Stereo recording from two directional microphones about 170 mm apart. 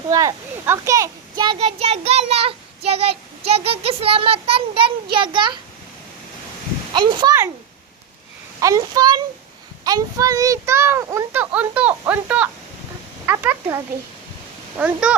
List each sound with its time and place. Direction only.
0.1 s a child's voice: 20° right (ahead or behind)
6.9 s a child's voice: 25° right (ahead or behind)
8.6 s a child's voice: 20° right (ahead or behind)